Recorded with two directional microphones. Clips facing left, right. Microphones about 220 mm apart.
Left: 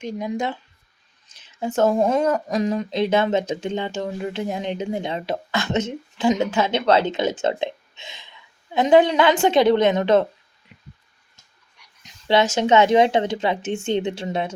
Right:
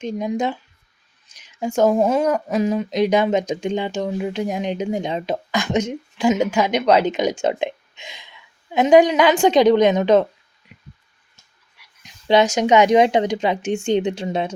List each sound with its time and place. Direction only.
0.0 s speech: 20° right (ahead or behind)
11.8 s dog: 5° right (ahead or behind)
12.3 s speech: 15° right (ahead or behind)